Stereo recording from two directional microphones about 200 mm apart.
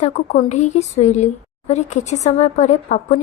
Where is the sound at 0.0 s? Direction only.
35° left (ahead or behind).